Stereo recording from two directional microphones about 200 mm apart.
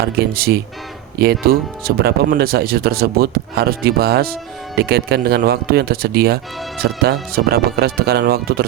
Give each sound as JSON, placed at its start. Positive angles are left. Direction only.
{"t": 0.0, "sound": "speech", "side_deg": -50}